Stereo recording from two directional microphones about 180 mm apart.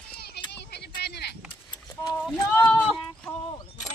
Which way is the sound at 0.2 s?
60° left (ahead or behind).